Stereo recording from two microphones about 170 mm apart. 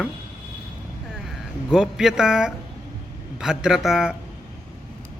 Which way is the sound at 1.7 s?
5° right (ahead or behind).